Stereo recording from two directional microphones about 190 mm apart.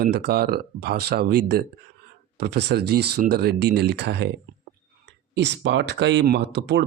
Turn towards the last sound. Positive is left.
turn(degrees=-60)  # may be behind; listen again after turning